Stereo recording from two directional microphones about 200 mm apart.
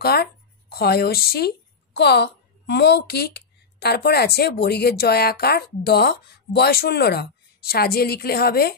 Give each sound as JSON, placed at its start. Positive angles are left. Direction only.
{"t": 0.0, "sound": "a woman's voice", "side_deg": 50}